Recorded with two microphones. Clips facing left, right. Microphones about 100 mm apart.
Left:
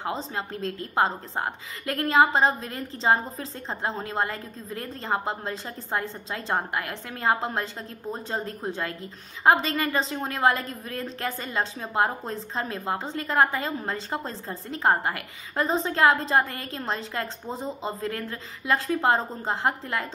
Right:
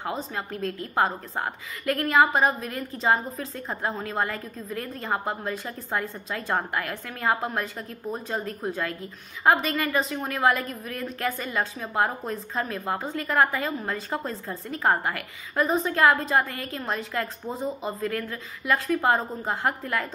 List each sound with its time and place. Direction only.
0.0 s a woman's voice: 25° left (ahead or behind)